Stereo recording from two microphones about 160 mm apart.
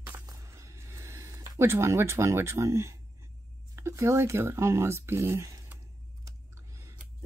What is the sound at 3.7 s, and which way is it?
Speech, 15° right (ahead or behind).